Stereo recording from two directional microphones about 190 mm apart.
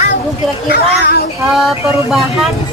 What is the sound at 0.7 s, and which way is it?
Speech, 55° left (ahead or behind).